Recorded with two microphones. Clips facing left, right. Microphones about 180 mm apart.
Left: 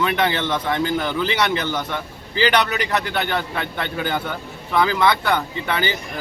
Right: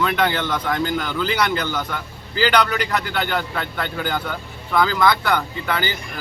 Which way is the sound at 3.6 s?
25° left (ahead or behind).